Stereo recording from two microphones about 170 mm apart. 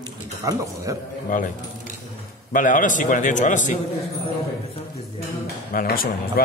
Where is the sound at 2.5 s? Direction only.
50° left (ahead or behind).